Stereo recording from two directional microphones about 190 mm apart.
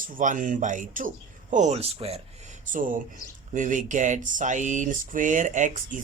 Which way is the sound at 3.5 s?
40° right (ahead or behind).